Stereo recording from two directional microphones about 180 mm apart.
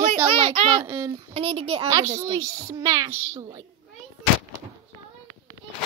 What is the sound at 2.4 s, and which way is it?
Speech, 20° right (ahead or behind).